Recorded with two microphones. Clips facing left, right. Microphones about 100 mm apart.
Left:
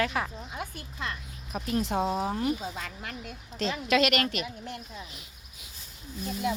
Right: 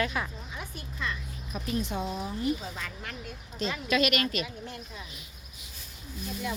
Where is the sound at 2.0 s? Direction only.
45° left (ahead or behind).